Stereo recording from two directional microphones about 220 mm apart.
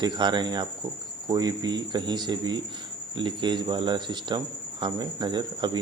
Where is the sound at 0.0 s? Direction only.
20° right (ahead or behind).